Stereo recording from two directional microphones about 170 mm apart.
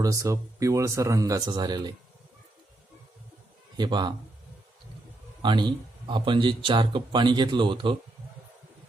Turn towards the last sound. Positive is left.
turn(degrees=-30)  # may be behind; listen again after turning